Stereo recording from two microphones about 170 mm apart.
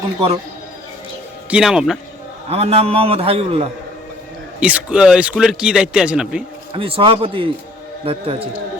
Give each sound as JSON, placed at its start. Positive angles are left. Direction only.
{"t": 1.5, "sound": "a man's voice", "side_deg": -5}
{"t": 2.5, "sound": "a man's voice", "side_deg": -35}
{"t": 4.6, "sound": "a man's voice", "side_deg": -5}
{"t": 6.7, "sound": "a man's voice", "side_deg": -30}